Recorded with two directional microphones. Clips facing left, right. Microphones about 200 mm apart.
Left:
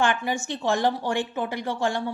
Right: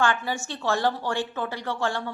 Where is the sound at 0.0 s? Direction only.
20° left (ahead or behind).